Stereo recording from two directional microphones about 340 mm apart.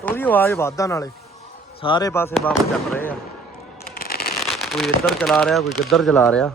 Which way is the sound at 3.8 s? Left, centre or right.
Left.